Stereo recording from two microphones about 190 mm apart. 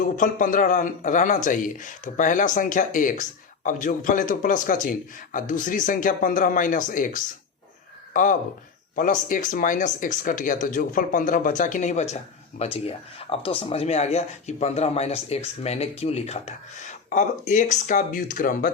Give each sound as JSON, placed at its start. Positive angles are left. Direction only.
{"t": 0.0, "sound": "speech", "side_deg": 45}